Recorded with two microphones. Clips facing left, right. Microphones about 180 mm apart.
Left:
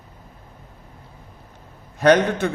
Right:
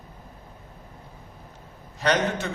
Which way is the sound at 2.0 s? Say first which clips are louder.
Left 8 dB; 55° left (ahead or behind).